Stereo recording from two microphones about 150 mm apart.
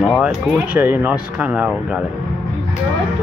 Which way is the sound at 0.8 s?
15° right (ahead or behind).